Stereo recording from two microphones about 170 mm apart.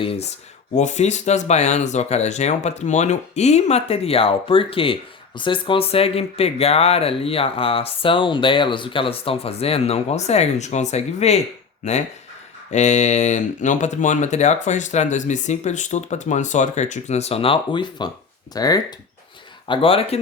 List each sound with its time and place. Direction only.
0.0 s speech: 35° left (ahead or behind)
12.7 s speech: 45° left (ahead or behind)